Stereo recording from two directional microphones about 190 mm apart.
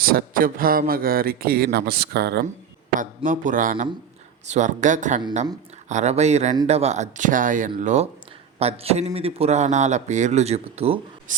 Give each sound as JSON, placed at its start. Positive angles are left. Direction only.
{"t": 0.0, "sound": "speech", "side_deg": -50}
{"t": 3.2, "sound": "a man's voice", "side_deg": -45}
{"t": 11.3, "sound": "writing", "side_deg": -45}